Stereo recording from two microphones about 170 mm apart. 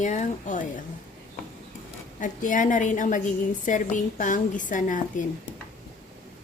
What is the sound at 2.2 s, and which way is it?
A woman's voice, 50° left (ahead or behind).